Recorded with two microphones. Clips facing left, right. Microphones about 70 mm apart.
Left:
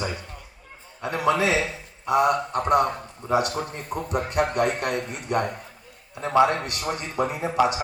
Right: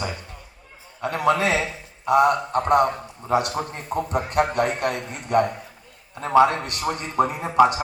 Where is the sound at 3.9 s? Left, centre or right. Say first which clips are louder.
Right 3 dB; right.